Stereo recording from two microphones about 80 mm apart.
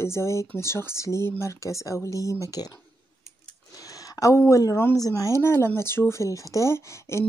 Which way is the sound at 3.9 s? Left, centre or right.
Left.